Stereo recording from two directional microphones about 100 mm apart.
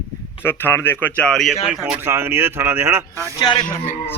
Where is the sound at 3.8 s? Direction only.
20° left (ahead or behind).